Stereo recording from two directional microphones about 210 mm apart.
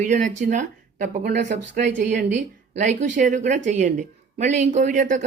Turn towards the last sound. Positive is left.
turn(degrees=-40)  # may be behind; listen again after turning